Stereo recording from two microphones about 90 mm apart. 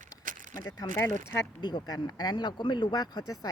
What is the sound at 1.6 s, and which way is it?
Speech, 55° left (ahead or behind).